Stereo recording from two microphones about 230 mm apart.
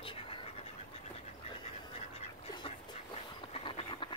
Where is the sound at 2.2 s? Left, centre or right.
Left.